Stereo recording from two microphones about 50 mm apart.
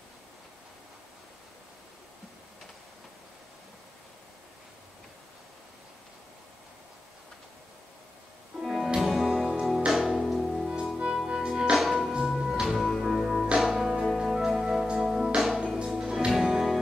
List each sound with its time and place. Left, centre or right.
8.5 s music: centre
11.2 s music: centre
11.7 s music: centre
12.1 s music: centre
15.8 s music: centre